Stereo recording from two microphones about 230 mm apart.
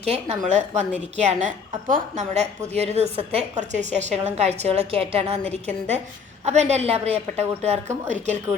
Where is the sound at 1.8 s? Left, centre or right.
Right.